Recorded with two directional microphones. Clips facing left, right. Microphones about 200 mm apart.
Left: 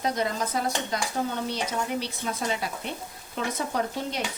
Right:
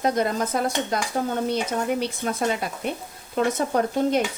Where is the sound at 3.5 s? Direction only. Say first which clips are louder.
Right 6 dB; 50° right (ahead or behind).